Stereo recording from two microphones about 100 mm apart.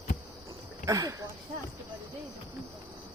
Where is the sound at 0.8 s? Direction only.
35° right (ahead or behind).